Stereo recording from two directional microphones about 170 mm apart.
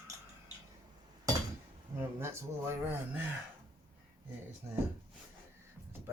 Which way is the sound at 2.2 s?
15° right (ahead or behind).